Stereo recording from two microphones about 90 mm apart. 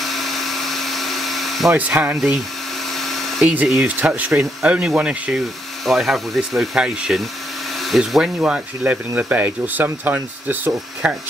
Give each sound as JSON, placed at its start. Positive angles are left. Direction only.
{"t": 0.0, "sound": "a sound", "side_deg": 0}
{"t": 1.8, "sound": "speech", "side_deg": -20}
{"t": 2.9, "sound": "dental drill", "side_deg": 0}
{"t": 3.4, "sound": "speech", "side_deg": -15}
{"t": 5.9, "sound": "speech", "side_deg": 0}